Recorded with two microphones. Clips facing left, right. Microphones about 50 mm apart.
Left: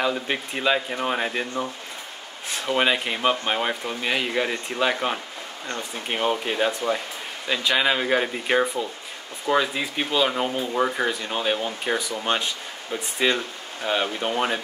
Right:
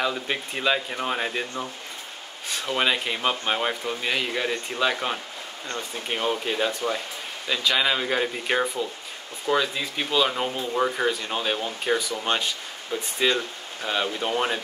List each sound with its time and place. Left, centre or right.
0.0 s speech: centre
2.5 s speech: centre
12.9 s speech: left
13.8 s speech: centre